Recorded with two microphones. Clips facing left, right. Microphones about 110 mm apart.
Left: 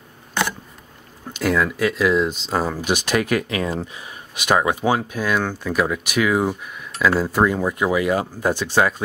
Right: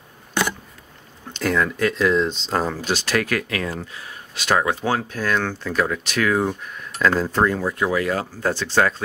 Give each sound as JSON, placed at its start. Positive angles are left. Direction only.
{"t": 1.3, "sound": "speech", "side_deg": 5}